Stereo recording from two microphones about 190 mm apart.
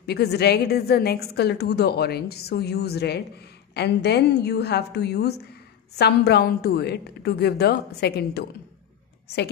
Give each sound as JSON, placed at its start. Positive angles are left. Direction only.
{"t": 0.0, "sound": "a woman's voice", "side_deg": 60}